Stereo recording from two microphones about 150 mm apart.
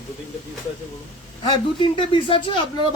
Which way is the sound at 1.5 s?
30° left (ahead or behind).